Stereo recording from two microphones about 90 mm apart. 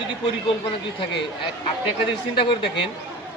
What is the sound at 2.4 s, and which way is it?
Speech, 70° left (ahead or behind).